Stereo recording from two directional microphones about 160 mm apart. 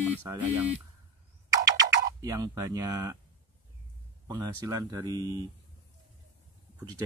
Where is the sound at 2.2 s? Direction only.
25° right (ahead or behind).